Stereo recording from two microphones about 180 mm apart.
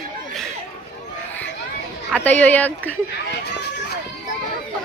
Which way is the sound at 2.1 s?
10° left (ahead or behind).